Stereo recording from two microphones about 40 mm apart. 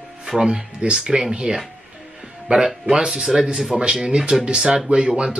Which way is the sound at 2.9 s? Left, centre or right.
Centre.